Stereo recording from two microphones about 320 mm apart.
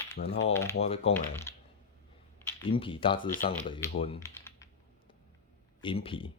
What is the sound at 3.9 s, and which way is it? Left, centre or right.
Typing, centre.